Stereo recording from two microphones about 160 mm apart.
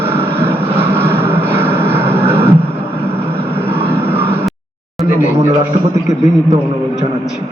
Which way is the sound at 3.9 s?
35° right (ahead or behind).